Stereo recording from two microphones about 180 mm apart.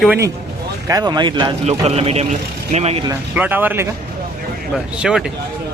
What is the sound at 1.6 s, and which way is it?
A man's voice, 35° right (ahead or behind).